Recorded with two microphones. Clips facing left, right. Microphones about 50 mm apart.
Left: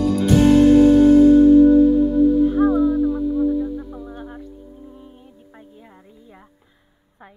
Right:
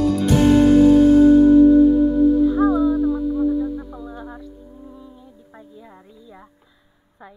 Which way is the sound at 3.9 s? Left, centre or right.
Right.